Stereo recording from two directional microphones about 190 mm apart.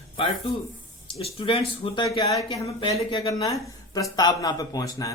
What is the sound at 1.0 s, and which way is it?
Speech, 30° left (ahead or behind).